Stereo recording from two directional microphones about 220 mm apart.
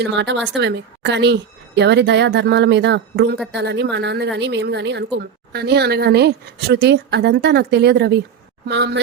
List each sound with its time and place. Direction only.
0.0 s speech: 55° right (ahead or behind)